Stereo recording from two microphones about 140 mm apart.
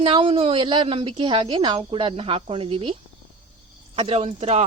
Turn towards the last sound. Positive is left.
turn(degrees=-50)  # may be behind; listen again after turning